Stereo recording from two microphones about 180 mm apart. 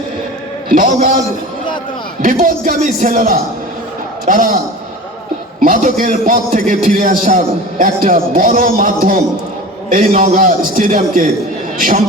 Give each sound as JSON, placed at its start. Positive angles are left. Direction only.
{"t": 0.7, "sound": "a man's voice", "side_deg": -50}
{"t": 2.2, "sound": "a man's voice", "side_deg": -50}
{"t": 5.5, "sound": "a man's voice", "side_deg": -50}